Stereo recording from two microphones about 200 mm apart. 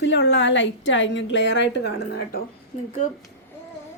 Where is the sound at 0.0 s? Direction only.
60° left (ahead or behind).